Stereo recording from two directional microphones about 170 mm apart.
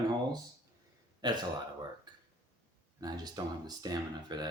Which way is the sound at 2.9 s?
25° right (ahead or behind).